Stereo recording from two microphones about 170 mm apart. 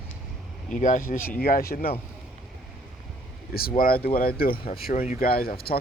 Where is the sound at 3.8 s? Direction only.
60° left (ahead or behind).